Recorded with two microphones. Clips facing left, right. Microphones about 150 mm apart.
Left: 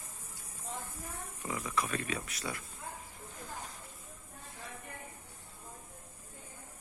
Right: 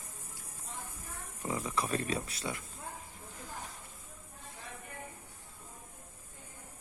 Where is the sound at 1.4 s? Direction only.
30° right (ahead or behind).